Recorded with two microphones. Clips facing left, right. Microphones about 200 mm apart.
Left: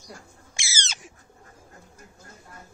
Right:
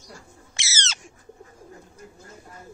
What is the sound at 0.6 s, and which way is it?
Owl, 10° left (ahead or behind).